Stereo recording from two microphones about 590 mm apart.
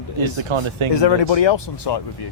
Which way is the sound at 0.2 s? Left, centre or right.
Right.